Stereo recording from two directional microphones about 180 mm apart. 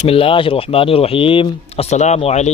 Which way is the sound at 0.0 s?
30° left (ahead or behind).